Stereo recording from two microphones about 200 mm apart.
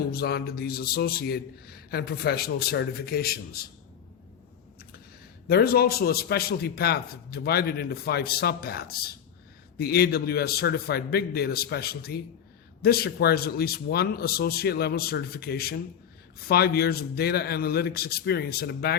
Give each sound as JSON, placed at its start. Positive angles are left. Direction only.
{"t": 0.1, "sound": "a man's voice", "side_deg": 50}
{"t": 5.5, "sound": "a man's voice", "side_deg": 50}